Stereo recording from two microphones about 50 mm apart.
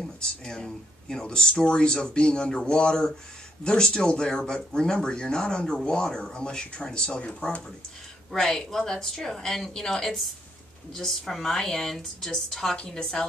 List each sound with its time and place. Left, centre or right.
0.0 s a woman's voice: centre
8.3 s a woman's voice: centre